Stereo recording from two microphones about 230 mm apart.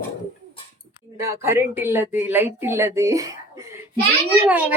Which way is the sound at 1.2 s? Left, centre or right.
Centre.